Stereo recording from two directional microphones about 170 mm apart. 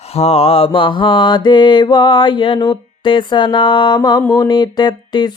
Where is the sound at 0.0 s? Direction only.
35° left (ahead or behind).